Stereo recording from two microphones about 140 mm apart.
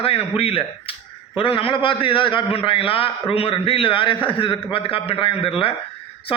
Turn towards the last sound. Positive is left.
turn(degrees=40)  # may be behind; listen again after turning